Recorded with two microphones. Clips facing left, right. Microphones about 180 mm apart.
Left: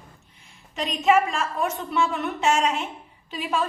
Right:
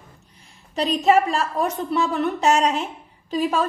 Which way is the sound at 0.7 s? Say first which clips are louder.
Right 3 dB; 35° right (ahead or behind).